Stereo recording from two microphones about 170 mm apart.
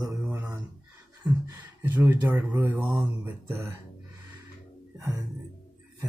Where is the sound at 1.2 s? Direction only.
10° right (ahead or behind).